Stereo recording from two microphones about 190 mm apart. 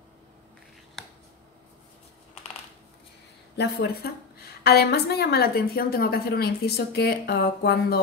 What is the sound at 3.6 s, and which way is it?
A woman's voice, 55° left (ahead or behind).